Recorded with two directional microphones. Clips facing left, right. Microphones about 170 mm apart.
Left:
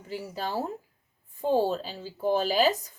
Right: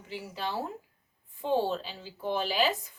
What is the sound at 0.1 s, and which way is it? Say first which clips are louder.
Speech: left 3 dB; 40° left (ahead or behind).